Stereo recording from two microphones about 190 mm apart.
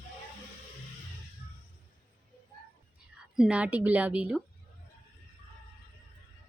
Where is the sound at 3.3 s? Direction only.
5° right (ahead or behind).